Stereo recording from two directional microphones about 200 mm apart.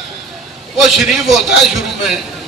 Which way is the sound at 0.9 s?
Centre (ahead or behind).